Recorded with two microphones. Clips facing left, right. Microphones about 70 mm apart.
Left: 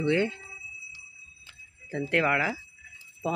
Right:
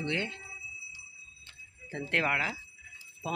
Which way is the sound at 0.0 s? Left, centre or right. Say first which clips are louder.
Left 8 dB; centre.